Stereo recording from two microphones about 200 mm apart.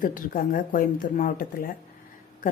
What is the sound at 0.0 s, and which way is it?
Speech, 45° left (ahead or behind).